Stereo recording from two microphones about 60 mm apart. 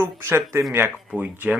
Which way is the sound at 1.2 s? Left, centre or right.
Right.